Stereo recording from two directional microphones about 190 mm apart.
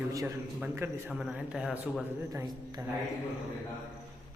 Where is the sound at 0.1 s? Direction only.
15° right (ahead or behind).